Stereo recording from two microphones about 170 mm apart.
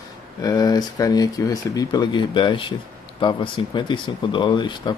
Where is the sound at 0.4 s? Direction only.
25° left (ahead or behind).